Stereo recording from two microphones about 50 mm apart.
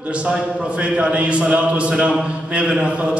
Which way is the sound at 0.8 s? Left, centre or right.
Right.